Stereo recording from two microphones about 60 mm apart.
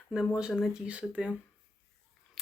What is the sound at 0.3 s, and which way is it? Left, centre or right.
Speech, centre.